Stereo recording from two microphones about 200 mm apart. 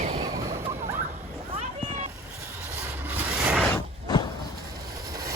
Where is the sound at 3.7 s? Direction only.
20° left (ahead or behind).